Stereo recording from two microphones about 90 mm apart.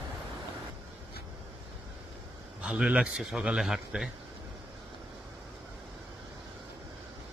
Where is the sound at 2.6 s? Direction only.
10° right (ahead or behind).